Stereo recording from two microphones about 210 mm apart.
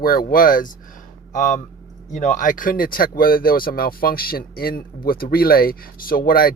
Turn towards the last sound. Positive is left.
turn(degrees=45)  # may be behind; listen again after turning